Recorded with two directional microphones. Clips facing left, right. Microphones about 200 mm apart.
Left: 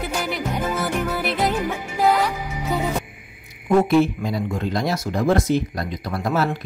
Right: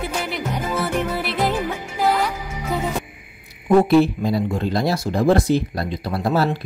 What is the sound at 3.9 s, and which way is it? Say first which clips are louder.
Speech: right 2 dB; 35° right (ahead or behind).